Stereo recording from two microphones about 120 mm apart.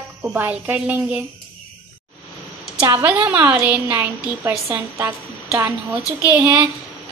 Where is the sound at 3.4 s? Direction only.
15° right (ahead or behind).